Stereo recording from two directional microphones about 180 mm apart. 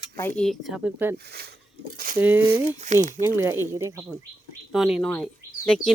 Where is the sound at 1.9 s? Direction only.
50° right (ahead or behind).